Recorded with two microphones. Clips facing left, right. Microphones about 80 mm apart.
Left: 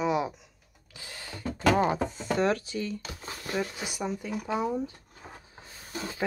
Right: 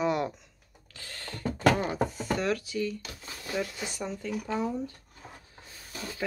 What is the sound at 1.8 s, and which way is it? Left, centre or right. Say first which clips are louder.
Speech: left 3 dB; left.